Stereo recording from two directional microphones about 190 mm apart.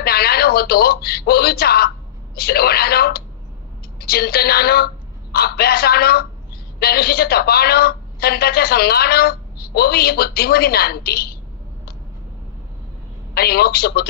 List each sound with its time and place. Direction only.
0.0 s a woman's voice: 55° left (ahead or behind)
13.3 s a woman's voice: 55° left (ahead or behind)